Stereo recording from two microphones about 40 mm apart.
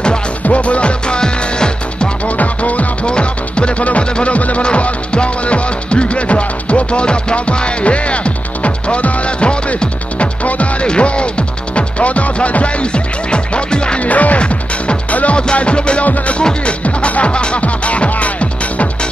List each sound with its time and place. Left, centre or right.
0.5 s music: left
2.2 s music: left
3.1 s music: left
14.0 s music: left
14.4 s music: left